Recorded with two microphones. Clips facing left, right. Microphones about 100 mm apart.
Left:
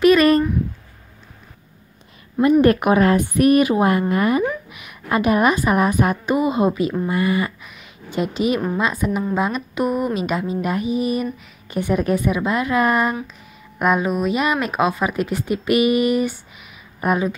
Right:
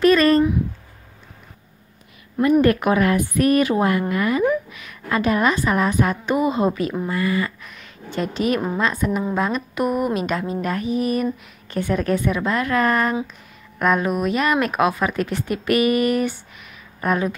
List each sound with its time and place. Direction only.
0.0 s a sound: 10° left (ahead or behind)
2.6 s a woman's voice: 20° left (ahead or behind)
6.2 s a woman's voice: 5° left (ahead or behind)
7.1 s speech: 20° left (ahead or behind)
7.6 s a woman's voice: 5° left (ahead or behind)